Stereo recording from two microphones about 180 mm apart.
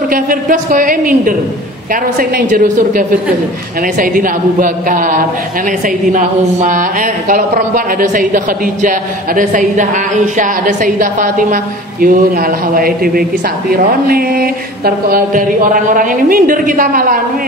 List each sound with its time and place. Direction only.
0.1 s a woman's voice: 50° right (ahead or behind)
13.7 s a sound: 55° right (ahead or behind)
15.0 s a woman's voice: 50° right (ahead or behind)